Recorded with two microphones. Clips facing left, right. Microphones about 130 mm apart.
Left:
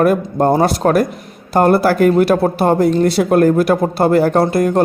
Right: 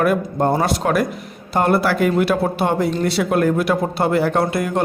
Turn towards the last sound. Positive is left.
turn(degrees=40)  # may be behind; listen again after turning